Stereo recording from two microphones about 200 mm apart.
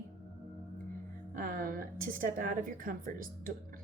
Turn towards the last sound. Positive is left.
turn(degrees=-45)  # may be behind; listen again after turning